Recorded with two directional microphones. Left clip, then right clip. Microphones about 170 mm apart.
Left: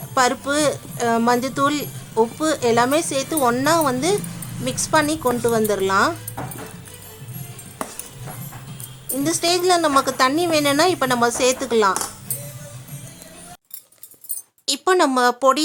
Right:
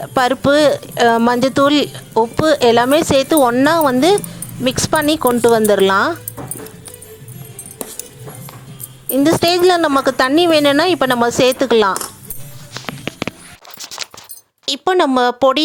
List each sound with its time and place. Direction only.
0.1 s speech: 35° right (ahead or behind)
9.1 s speech: 30° right (ahead or behind)
14.6 s speech: 25° right (ahead or behind)